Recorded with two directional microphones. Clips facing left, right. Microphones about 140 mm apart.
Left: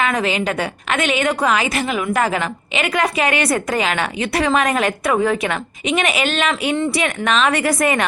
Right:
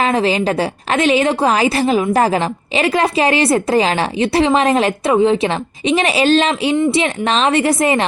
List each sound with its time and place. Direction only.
0.0 s a woman's voice: 30° right (ahead or behind)